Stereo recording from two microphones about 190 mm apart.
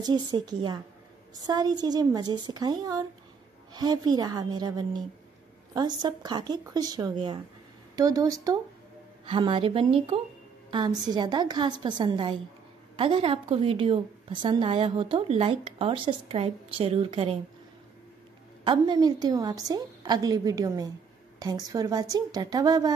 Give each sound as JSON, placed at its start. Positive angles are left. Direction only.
{"t": 0.3, "sound": "a woman's voice", "side_deg": -20}
{"t": 18.6, "sound": "a woman's voice", "side_deg": -25}